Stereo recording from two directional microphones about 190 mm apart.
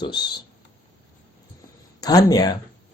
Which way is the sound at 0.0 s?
25° left (ahead or behind).